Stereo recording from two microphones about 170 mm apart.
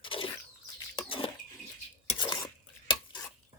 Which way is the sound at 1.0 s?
30° left (ahead or behind).